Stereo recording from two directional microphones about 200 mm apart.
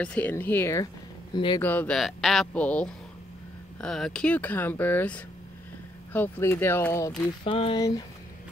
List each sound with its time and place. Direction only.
0.0 s speech: 5° left (ahead or behind)
1.3 s speech: 20° left (ahead or behind)
1.6 s speech: 10° left (ahead or behind)
7.1 s speech: 30° left (ahead or behind)